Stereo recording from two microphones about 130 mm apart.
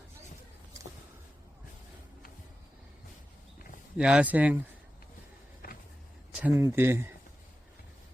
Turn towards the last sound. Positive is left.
turn(degrees=-20)  # may be behind; listen again after turning